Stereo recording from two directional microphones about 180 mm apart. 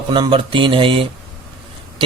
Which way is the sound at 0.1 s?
30° right (ahead or behind).